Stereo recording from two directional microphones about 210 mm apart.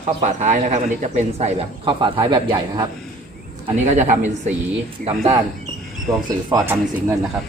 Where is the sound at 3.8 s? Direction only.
35° right (ahead or behind).